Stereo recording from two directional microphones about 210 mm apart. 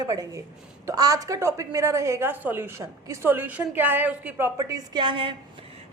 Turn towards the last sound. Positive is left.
turn(degrees=-25)  # may be behind; listen again after turning